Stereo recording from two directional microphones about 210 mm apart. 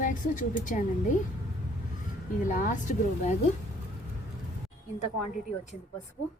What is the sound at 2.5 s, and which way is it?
Speech, 35° left (ahead or behind).